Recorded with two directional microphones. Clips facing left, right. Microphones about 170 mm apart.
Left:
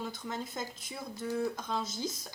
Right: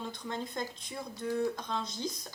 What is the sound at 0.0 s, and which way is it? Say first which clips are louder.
Speech: even; 5° left (ahead or behind).